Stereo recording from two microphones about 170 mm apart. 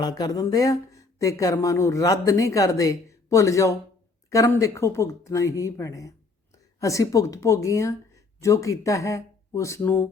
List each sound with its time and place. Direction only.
0.0 s speech: 20° left (ahead or behind)